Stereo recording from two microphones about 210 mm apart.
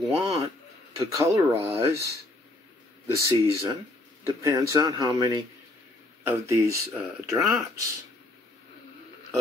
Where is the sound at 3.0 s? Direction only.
15° right (ahead or behind).